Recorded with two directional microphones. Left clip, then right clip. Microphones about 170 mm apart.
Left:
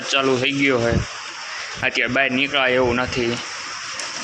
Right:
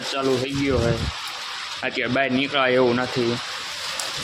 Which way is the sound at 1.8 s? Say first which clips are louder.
Left 4 dB; 15° right (ahead or behind).